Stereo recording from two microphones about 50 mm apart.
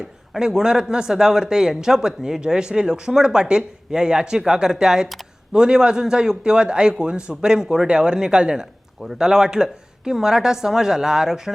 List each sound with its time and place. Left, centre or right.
0.3 s speech: centre